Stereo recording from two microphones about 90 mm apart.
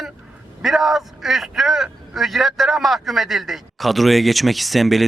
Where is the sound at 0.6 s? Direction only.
5° right (ahead or behind).